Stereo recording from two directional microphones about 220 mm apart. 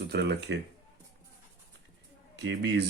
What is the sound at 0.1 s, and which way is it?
Speech, 50° right (ahead or behind).